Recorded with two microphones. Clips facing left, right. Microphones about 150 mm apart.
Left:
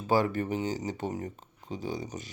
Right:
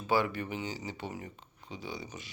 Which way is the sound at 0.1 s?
40° left (ahead or behind).